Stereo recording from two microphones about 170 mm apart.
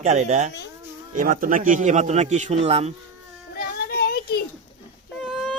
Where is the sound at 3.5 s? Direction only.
60° left (ahead or behind).